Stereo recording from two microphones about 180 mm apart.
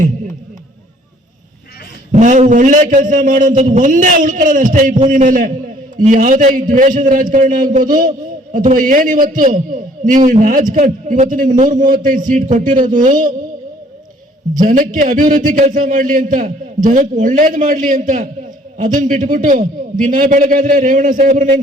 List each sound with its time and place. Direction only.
2.1 s a man's voice: 45° right (ahead or behind)
14.5 s a man's voice: 45° right (ahead or behind)